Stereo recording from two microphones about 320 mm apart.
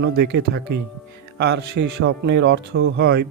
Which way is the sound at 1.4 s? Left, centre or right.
Right.